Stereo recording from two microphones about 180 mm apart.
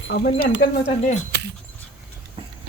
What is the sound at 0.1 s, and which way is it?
Speech, 60° left (ahead or behind).